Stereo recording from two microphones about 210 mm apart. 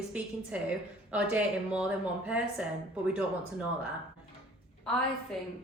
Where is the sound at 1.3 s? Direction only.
5° right (ahead or behind).